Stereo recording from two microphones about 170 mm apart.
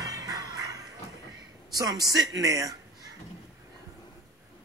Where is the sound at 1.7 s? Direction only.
20° right (ahead or behind).